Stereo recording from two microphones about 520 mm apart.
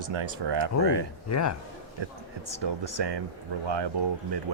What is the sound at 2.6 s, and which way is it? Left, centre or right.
Speech, right.